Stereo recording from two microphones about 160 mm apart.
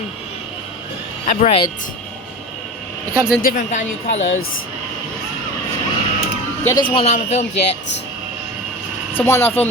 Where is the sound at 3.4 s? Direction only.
50° left (ahead or behind).